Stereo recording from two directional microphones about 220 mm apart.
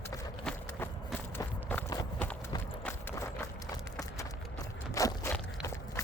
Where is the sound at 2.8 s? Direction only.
10° left (ahead or behind).